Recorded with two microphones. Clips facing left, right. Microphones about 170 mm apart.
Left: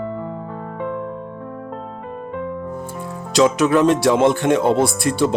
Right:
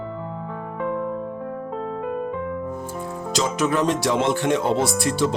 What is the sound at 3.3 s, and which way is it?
Speech, 70° left (ahead or behind).